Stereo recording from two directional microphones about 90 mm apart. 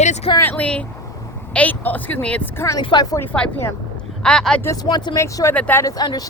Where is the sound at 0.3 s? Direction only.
20° left (ahead or behind).